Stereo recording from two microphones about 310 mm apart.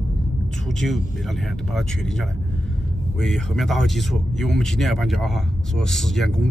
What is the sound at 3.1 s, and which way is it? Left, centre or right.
Speech, centre.